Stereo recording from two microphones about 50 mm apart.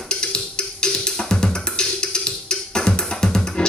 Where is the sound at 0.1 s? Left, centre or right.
Centre.